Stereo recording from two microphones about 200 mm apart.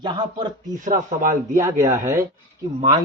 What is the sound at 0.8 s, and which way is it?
Speech, 40° right (ahead or behind).